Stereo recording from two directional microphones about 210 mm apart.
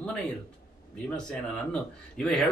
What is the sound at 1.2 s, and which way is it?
Speech, 5° left (ahead or behind).